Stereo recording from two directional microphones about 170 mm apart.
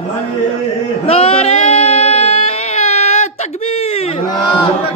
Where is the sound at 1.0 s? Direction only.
35° left (ahead or behind).